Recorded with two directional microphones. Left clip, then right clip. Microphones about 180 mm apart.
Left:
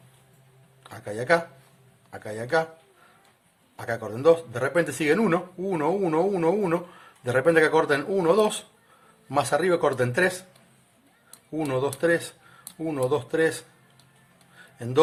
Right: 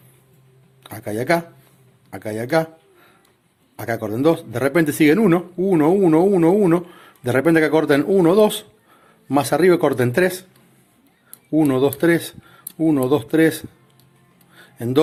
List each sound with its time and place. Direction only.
0.8 s a sound: 50° right (ahead or behind)
2.0 s speech: 50° right (ahead or behind)
3.8 s speech: 45° right (ahead or behind)
11.5 s speech: 45° right (ahead or behind)
14.5 s music: 45° right (ahead or behind)